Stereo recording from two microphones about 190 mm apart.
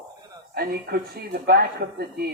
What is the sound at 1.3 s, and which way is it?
Speech, 55° right (ahead or behind).